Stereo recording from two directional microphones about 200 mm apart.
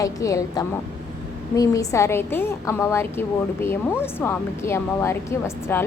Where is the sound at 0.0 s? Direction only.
15° left (ahead or behind).